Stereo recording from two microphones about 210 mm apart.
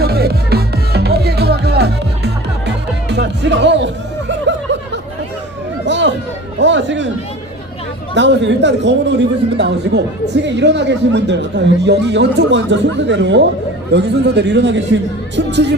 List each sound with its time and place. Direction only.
0.0 s music: 50° right (ahead or behind)
5.8 s a sound: 55° right (ahead or behind)
6.6 s chatter: 60° right (ahead or behind)
8.1 s a man's voice: 55° right (ahead or behind)